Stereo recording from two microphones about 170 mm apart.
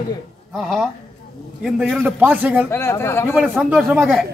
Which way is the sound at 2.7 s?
15° left (ahead or behind).